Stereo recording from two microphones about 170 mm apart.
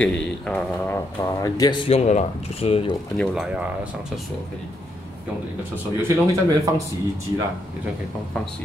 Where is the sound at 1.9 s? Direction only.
40° left (ahead or behind).